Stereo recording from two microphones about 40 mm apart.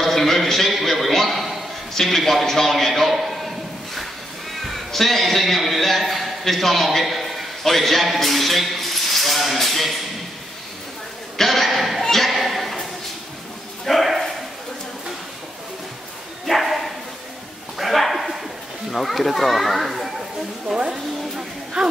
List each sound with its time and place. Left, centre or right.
0.0 s a man's voice: centre
11.3 s speech: centre
12.0 s a sound: centre
13.8 s bow-wow: centre
16.4 s bow-wow: centre
18.9 s a child's voice: centre
20.6 s speech: right
21.8 s speech: centre